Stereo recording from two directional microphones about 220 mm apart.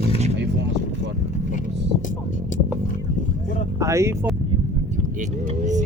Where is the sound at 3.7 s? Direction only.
15° right (ahead or behind).